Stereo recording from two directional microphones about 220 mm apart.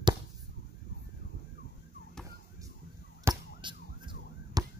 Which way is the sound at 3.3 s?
20° right (ahead or behind).